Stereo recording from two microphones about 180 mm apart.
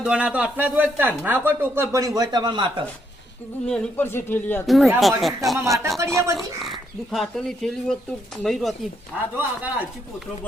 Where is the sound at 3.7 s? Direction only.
5° left (ahead or behind).